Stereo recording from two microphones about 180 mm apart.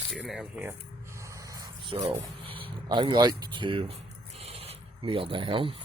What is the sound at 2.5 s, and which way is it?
Speech, 25° right (ahead or behind).